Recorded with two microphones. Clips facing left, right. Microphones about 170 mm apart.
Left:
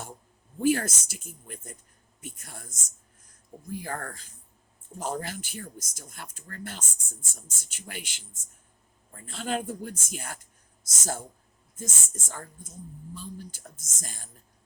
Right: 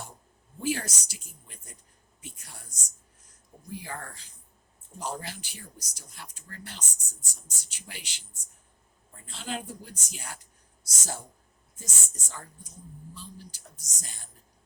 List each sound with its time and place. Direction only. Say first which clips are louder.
0.6 s speech: left 7 dB; 50° left (ahead or behind)